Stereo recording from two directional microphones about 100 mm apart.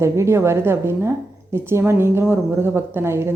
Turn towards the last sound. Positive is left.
turn(degrees=-25)  # may be behind; listen again after turning